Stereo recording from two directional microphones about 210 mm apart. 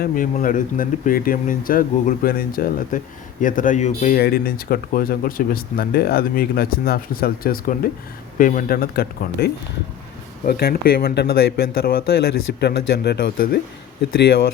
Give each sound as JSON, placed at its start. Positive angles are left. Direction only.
{"t": 0.0, "sound": "speech", "side_deg": 40}